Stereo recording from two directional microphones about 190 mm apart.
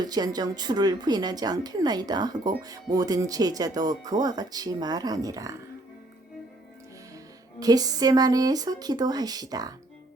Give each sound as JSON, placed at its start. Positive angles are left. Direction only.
{"t": 0.0, "sound": "speech", "side_deg": -20}
{"t": 7.6, "sound": "speech", "side_deg": -20}